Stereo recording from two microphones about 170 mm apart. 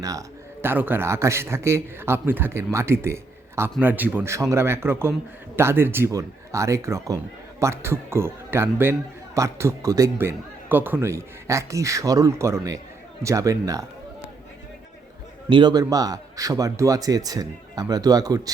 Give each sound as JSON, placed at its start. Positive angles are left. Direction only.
{"t": 0.0, "sound": "a man's voice", "side_deg": -20}
{"t": 15.4, "sound": "a man's voice", "side_deg": -30}